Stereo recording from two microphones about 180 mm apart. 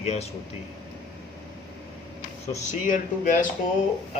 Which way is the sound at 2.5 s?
45° left (ahead or behind).